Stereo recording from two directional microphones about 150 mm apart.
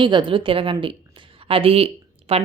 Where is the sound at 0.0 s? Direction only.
30° right (ahead or behind).